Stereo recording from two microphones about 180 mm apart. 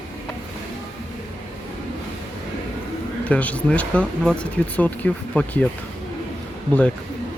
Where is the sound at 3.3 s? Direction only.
10° left (ahead or behind).